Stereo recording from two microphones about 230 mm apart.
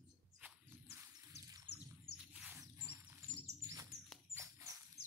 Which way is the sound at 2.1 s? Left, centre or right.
Centre.